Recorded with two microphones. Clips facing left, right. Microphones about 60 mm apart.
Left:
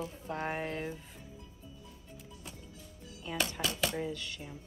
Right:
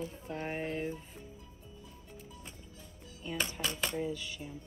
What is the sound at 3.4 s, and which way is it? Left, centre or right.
Dishes, right.